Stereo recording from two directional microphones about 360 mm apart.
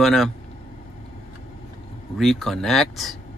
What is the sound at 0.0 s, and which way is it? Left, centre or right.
Speech, centre.